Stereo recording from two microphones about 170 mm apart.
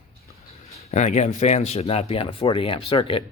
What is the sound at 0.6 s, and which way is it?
Speech, 40° left (ahead or behind).